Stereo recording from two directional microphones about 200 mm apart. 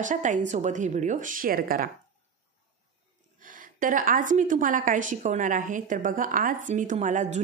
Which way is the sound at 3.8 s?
40° right (ahead or behind).